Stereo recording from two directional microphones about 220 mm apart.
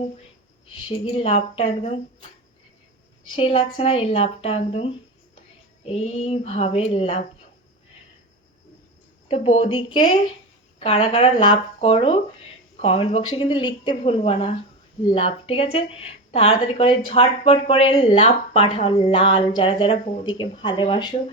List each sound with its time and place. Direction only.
0.7 s a woman's voice: 25° left (ahead or behind)
3.3 s a woman's voice: 25° left (ahead or behind)
9.3 s a woman's voice: 25° left (ahead or behind)